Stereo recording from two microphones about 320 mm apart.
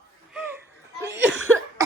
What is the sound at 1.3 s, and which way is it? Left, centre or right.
Cough, right.